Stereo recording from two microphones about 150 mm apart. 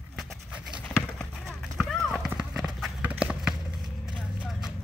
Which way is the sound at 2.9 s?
10° right (ahead or behind).